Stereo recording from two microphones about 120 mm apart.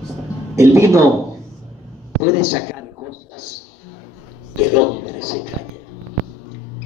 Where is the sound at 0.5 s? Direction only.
25° right (ahead or behind).